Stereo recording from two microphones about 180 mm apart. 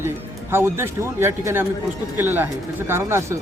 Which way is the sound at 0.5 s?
15° right (ahead or behind).